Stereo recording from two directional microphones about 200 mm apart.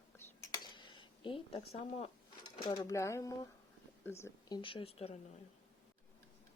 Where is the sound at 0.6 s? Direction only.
25° left (ahead or behind).